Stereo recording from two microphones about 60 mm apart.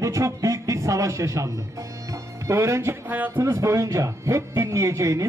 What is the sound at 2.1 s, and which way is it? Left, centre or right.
Music, right.